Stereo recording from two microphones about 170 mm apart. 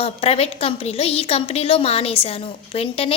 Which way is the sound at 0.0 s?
35° left (ahead or behind).